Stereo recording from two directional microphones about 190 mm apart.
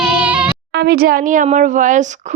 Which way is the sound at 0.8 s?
55° right (ahead or behind).